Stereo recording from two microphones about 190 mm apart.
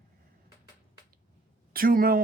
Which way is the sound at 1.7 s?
50° right (ahead or behind).